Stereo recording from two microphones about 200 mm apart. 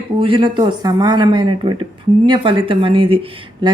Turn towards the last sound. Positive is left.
turn(degrees=-25)  # may be behind; listen again after turning